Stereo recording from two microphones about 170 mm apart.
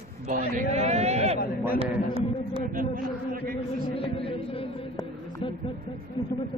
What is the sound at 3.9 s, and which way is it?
Speech, 35° left (ahead or behind).